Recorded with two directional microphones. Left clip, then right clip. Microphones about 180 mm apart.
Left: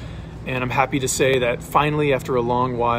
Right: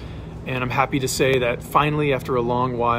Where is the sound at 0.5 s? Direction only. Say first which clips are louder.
Left 1 dB; 15° right (ahead or behind).